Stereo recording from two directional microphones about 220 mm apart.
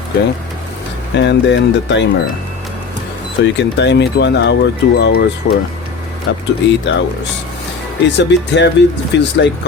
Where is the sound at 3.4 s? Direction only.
55° left (ahead or behind).